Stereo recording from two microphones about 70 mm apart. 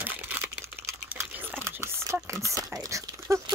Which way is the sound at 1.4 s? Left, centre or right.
Right.